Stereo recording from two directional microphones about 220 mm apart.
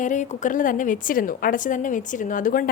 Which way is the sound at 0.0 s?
35° left (ahead or behind).